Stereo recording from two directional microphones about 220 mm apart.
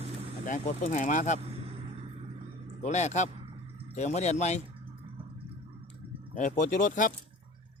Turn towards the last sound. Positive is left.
turn(degrees=35)  # may be behind; listen again after turning